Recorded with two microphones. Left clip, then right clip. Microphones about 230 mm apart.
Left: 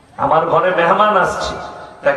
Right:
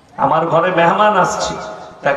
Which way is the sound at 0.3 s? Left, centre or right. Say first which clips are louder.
Left 2 dB; right.